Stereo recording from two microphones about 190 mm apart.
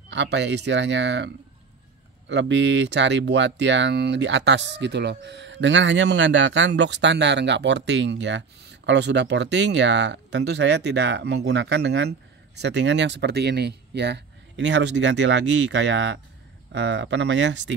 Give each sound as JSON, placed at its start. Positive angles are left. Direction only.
{"t": 0.1, "sound": "speech", "side_deg": -70}